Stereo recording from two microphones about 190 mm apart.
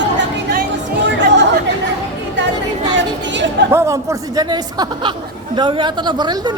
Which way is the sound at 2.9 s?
70° right (ahead or behind).